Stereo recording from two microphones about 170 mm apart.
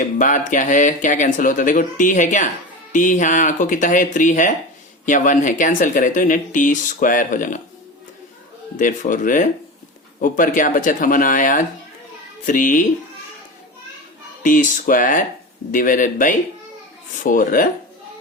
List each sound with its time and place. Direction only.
0.2 s speech: 50° left (ahead or behind)
8.8 s speech: 50° left (ahead or behind)
14.4 s speech: 50° left (ahead or behind)